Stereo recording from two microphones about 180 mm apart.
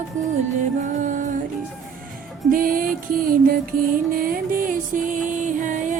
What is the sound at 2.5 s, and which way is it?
Music, 50° right (ahead or behind).